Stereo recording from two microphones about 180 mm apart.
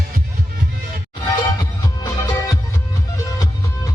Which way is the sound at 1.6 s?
20° left (ahead or behind).